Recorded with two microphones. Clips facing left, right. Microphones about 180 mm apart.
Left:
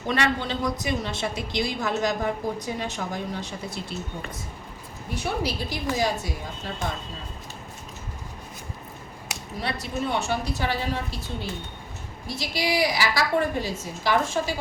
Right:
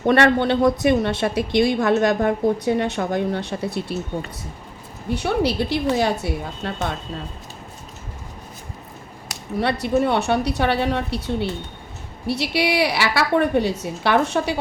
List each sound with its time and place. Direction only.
0.0 s a woman's voice: 65° right (ahead or behind)
5.1 s a woman's voice: 65° right (ahead or behind)
9.8 s a woman's voice: 65° right (ahead or behind)